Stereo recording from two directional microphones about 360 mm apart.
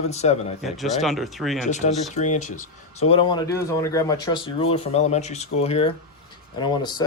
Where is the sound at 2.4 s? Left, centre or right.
Left.